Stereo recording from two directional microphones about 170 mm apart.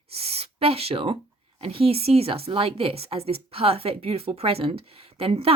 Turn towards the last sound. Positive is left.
turn(degrees=-35)  # may be behind; listen again after turning